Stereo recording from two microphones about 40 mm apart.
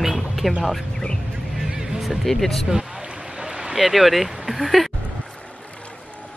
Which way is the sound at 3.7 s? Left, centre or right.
Centre.